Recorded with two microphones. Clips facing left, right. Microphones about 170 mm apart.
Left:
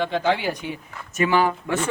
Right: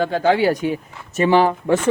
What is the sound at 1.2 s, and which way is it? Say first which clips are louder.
Speech: right 5 dB; 35° right (ahead or behind).